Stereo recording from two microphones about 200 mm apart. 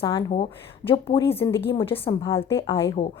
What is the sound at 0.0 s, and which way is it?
Speech, 20° left (ahead or behind).